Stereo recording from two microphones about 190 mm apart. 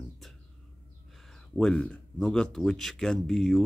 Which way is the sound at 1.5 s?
5° left (ahead or behind).